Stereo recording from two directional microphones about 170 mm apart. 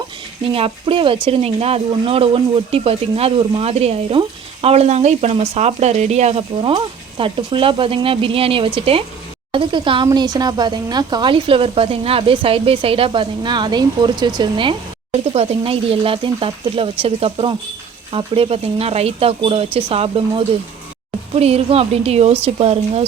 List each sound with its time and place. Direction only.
0.4 s speech: 35° right (ahead or behind)